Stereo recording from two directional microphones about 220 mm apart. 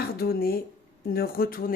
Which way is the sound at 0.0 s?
45° left (ahead or behind).